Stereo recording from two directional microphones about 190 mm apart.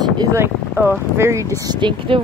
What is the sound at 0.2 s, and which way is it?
Speech, 15° right (ahead or behind).